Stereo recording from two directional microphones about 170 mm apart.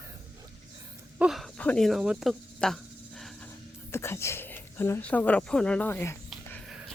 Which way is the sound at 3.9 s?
15° left (ahead or behind).